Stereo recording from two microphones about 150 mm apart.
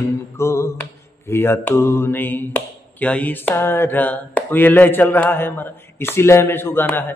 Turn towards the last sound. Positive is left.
turn(degrees=15)  # may be behind; listen again after turning